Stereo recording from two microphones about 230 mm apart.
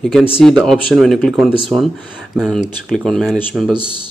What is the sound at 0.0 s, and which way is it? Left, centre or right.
Speech, centre.